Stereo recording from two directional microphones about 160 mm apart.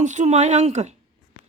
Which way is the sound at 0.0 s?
50° right (ahead or behind).